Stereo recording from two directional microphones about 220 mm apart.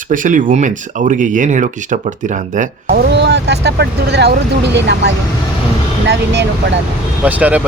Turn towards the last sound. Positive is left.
turn(degrees=-5)  # may be behind; listen again after turning